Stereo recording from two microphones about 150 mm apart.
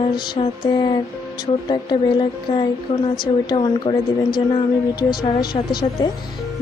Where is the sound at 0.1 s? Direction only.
30° left (ahead or behind).